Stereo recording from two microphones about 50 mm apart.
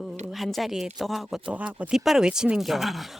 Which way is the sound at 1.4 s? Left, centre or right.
Right.